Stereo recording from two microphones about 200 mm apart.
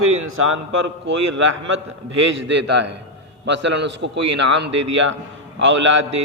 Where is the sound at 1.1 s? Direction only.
70° right (ahead or behind).